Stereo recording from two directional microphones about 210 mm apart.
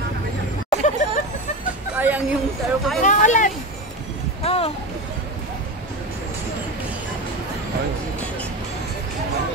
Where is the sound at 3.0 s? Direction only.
35° left (ahead or behind).